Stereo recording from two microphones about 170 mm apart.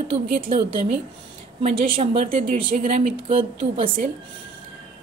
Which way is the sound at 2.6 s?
50° right (ahead or behind).